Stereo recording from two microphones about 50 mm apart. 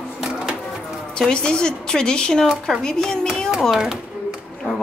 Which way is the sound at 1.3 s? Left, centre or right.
Centre.